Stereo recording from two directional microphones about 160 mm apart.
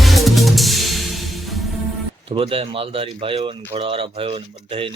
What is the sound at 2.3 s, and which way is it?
Speech, 35° right (ahead or behind).